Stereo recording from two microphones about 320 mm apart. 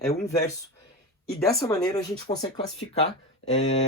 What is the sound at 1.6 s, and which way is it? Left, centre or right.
Speech, centre.